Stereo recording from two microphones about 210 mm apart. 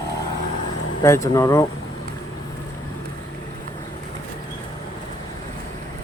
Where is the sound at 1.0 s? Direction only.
15° left (ahead or behind).